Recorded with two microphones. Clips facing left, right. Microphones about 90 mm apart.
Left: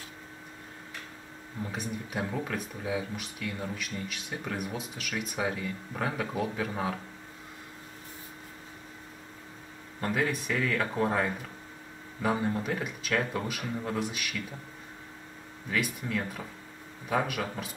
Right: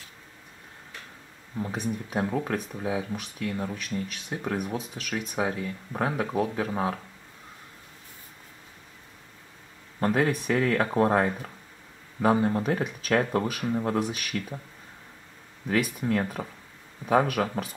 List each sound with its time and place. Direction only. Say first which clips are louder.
1.7 s speech: right 5 dB; 35° right (ahead or behind)
9.9 s speech: right 5 dB; 40° right (ahead or behind)
15.7 s speech: right 6 dB; 45° right (ahead or behind)